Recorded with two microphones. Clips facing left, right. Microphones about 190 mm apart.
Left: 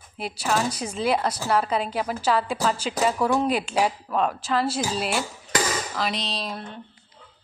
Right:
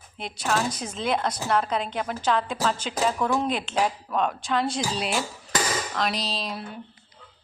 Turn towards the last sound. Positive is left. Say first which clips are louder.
# even
turn(degrees=-5)  # may be behind; listen again after turning